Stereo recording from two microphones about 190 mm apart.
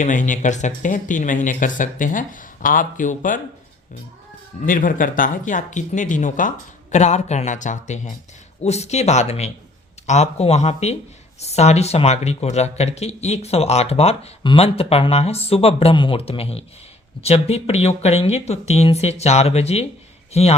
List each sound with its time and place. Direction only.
0.0 s speech: 40° left (ahead or behind)
4.6 s speech: 45° left (ahead or behind)